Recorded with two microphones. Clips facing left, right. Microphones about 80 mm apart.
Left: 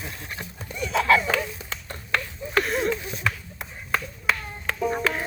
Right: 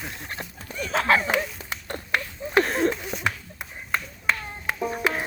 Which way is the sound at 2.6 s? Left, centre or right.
Right.